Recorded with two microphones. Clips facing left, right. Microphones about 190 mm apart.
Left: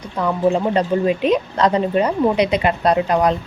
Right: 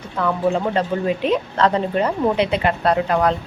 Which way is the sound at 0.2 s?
20° left (ahead or behind).